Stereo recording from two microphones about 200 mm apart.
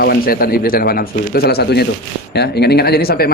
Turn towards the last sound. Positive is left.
turn(degrees=50)  # may be behind; listen again after turning